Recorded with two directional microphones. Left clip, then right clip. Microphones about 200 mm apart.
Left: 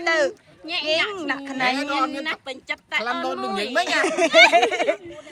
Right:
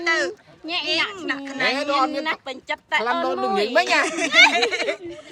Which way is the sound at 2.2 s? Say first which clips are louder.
Right 2 dB; 35° right (ahead or behind).